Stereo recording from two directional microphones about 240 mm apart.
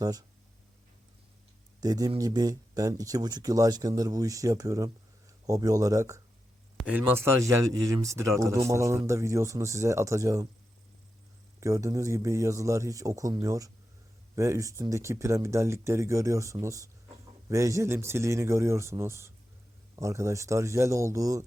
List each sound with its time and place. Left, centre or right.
0.0 s speech: centre
1.8 s speech: centre
11.6 s speech: centre